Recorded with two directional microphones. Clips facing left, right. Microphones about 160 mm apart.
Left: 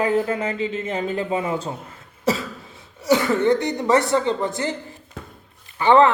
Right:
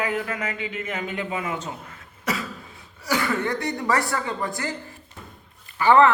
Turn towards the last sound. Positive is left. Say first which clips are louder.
# left 2 dB
turn(degrees=20)  # may be behind; listen again after turning